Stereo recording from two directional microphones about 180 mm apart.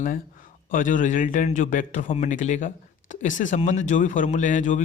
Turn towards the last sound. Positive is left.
turn(degrees=45)  # may be behind; listen again after turning